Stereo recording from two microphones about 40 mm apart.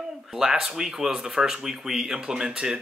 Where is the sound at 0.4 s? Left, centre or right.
Centre.